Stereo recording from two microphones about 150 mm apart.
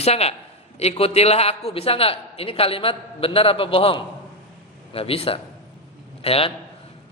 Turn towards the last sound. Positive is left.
turn(degrees=40)  # may be behind; listen again after turning